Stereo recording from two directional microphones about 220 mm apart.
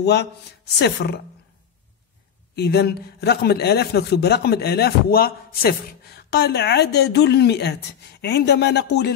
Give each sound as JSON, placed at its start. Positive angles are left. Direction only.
{"t": 0.0, "sound": "a man's voice", "side_deg": 50}
{"t": 2.5, "sound": "a man's voice", "side_deg": 45}